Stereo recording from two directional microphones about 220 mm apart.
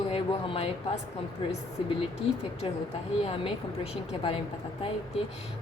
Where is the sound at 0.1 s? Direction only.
25° left (ahead or behind).